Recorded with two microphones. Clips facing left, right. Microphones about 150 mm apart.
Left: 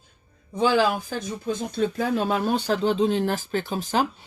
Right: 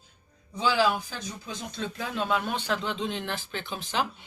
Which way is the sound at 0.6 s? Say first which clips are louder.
Left 4 dB; 50° left (ahead or behind).